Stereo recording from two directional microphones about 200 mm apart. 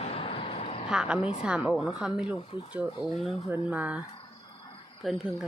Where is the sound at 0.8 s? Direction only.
5° right (ahead or behind).